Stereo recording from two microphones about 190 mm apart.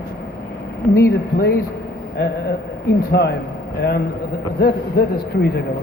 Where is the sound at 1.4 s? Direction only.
55° left (ahead or behind).